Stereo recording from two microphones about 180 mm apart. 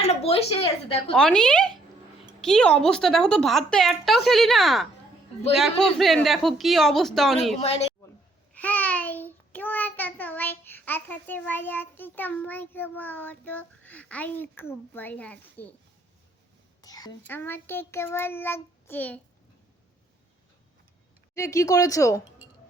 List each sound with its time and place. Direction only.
0.1 s a woman's voice: 35° left (ahead or behind)
1.1 s a woman's voice: 5° left (ahead or behind)
8.5 s child singing: 10° left (ahead or behind)
16.8 s a sound: 20° left (ahead or behind)
17.2 s child singing: 10° left (ahead or behind)
21.3 s child singing: 15° left (ahead or behind)